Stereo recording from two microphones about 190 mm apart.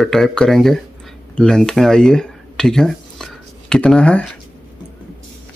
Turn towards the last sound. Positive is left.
turn(degrees=5)  # may be behind; listen again after turning